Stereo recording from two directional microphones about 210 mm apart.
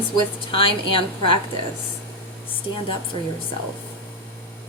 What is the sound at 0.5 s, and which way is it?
Speech, 25° left (ahead or behind).